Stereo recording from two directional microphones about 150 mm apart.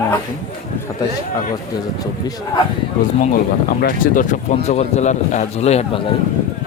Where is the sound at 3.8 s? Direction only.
65° left (ahead or behind); by 6.0 s 45° left (ahead or behind).